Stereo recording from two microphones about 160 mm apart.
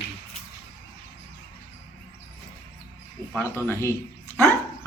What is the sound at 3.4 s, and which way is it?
Speech, 15° left (ahead or behind).